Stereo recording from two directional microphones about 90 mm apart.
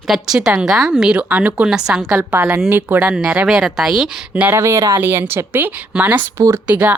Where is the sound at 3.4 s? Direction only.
5° right (ahead or behind).